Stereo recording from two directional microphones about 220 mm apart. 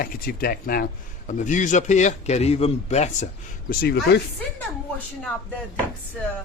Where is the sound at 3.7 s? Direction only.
45° left (ahead or behind).